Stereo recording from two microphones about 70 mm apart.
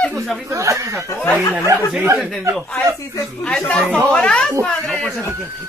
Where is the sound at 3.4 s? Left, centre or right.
Centre.